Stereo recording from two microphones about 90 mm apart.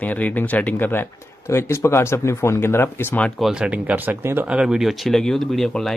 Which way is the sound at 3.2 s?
Centre (ahead or behind).